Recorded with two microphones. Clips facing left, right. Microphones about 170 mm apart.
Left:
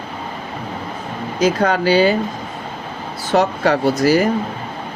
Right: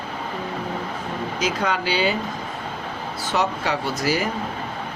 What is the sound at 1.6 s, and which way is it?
Speech, 45° left (ahead or behind).